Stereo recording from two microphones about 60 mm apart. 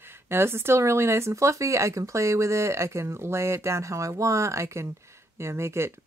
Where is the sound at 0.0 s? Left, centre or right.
Right.